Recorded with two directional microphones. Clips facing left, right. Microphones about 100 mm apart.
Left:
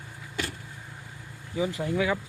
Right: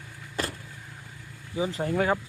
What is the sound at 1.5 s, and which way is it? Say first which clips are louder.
Speech: even; 25° right (ahead or behind).